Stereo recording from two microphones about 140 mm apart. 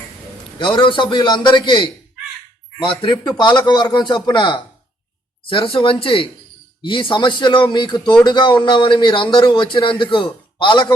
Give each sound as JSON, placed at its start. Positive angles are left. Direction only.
{"t": 0.6, "sound": "a man's voice", "side_deg": 35}
{"t": 3.0, "sound": "a man's voice", "side_deg": 30}